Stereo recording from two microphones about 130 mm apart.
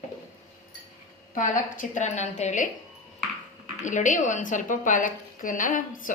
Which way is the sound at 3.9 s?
75° left (ahead or behind).